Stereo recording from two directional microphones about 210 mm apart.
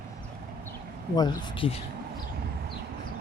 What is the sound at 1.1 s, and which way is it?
Speech, 20° left (ahead or behind).